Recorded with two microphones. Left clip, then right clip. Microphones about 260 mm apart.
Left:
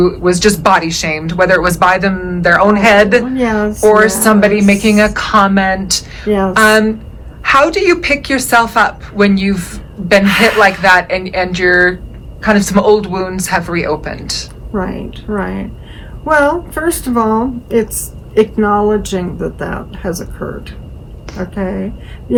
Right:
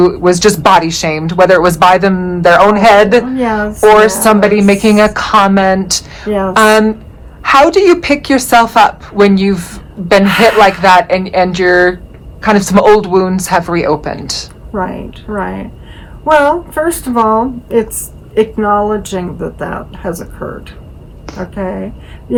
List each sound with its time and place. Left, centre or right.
0.1 s speech: right
3.3 s a woman's voice: centre
4.0 s speech: right
14.7 s a woman's voice: centre